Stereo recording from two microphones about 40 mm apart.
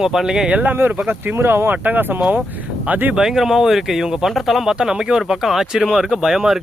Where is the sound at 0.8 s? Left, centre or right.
Right.